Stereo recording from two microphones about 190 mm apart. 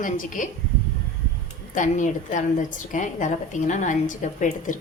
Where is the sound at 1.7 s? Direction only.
40° left (ahead or behind).